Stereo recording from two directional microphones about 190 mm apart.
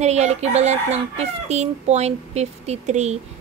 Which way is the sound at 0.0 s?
35° right (ahead or behind).